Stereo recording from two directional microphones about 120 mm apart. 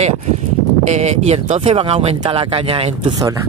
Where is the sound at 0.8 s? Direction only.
70° right (ahead or behind).